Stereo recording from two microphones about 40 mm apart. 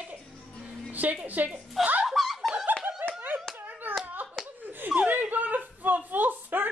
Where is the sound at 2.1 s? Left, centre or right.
Centre.